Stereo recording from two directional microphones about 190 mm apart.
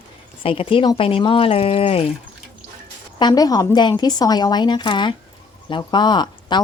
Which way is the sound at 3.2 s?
20° left (ahead or behind).